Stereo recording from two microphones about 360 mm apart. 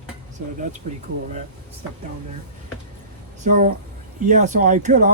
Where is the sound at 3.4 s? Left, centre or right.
Centre.